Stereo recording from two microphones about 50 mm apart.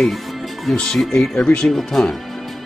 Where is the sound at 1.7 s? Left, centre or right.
Centre.